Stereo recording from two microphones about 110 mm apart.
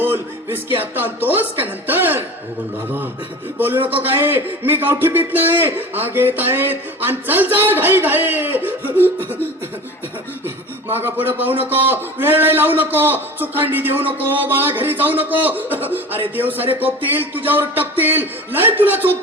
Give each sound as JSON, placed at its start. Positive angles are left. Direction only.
{"t": 0.0, "sound": "speech", "side_deg": -20}
{"t": 3.6, "sound": "a man's voice", "side_deg": -20}
{"t": 10.4, "sound": "a man's voice", "side_deg": -20}